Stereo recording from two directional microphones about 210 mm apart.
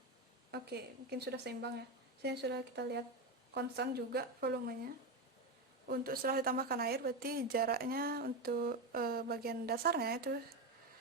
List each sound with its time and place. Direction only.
0.5 s speech: 50° right (ahead or behind)
5.9 s speech: 45° right (ahead or behind)